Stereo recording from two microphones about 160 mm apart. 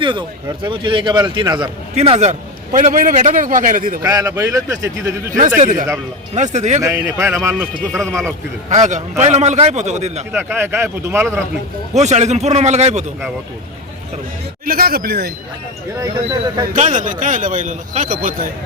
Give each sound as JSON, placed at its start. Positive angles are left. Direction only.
{"t": 0.0, "sound": "speech", "side_deg": -30}
{"t": 2.0, "sound": "a man's voice", "side_deg": -45}
{"t": 2.7, "sound": "a man's voice", "side_deg": -55}
{"t": 4.0, "sound": "speech", "side_deg": -20}
{"t": 5.5, "sound": "a man's voice", "side_deg": -50}
{"t": 6.8, "sound": "speech", "side_deg": -15}
{"t": 8.7, "sound": "a man's voice", "side_deg": -45}
{"t": 10.3, "sound": "speech", "side_deg": -15}
{"t": 11.9, "sound": "a man's voice", "side_deg": -45}
{"t": 14.7, "sound": "speech", "side_deg": -70}
{"t": 16.0, "sound": "speech", "side_deg": -25}
{"t": 16.7, "sound": "a man's voice", "side_deg": -50}